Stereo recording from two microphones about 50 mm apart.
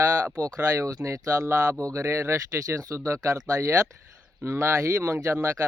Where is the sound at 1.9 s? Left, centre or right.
Right.